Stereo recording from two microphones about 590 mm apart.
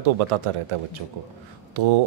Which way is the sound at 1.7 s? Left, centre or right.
Right.